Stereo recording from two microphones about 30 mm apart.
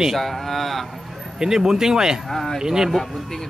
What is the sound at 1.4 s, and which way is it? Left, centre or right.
Speech, centre.